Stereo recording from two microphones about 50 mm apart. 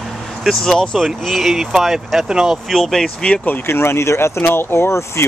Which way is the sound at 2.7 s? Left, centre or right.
Centre.